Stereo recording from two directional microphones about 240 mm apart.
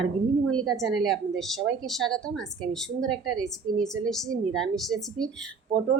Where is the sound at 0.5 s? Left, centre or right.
Centre.